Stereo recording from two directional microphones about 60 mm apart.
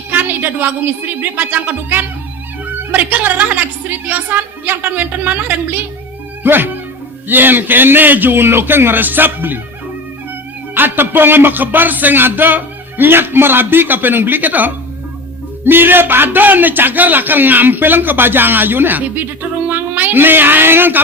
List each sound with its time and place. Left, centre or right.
0.1 s a sound: right
1.2 s speech: right
6.4 s music: right
7.3 s speech: right
10.8 s speech: right